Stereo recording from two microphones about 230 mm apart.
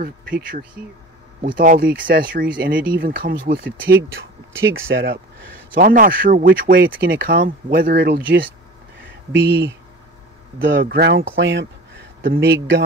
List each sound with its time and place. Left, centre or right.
0.0 s speech: right
4.6 s speech: right
5.8 s speech: right
10.8 s speech: right